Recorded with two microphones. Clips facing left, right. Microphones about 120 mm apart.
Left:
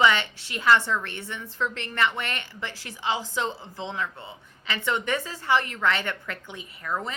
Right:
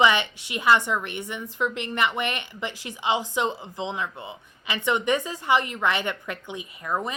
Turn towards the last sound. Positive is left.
turn(degrees=-15)  # may be behind; listen again after turning